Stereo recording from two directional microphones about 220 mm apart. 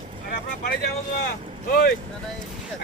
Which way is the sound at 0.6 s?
40° left (ahead or behind).